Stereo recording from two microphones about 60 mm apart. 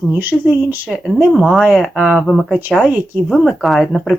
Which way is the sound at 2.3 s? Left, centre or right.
Centre.